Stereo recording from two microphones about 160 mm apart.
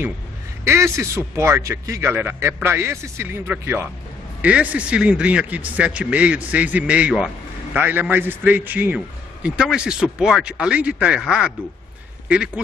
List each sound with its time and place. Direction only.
0.7 s a man's voice: 20° right (ahead or behind)